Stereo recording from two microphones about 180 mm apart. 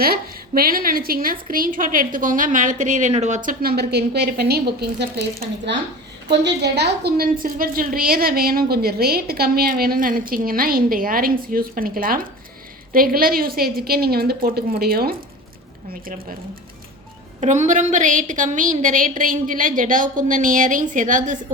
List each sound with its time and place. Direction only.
0.0 s a woman's voice: 55° right (ahead or behind)
6.4 s a woman's voice: 70° right (ahead or behind)
17.4 s a woman's voice: 40° right (ahead or behind)